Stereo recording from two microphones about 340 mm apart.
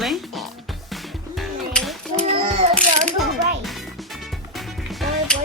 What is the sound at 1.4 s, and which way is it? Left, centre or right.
Music, centre.